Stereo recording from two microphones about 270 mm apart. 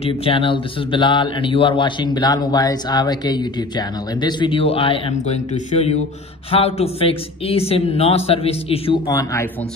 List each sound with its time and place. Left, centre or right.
0.0 s speech: left